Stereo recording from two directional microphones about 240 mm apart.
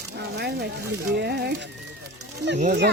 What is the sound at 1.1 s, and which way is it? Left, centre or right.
Speech, right.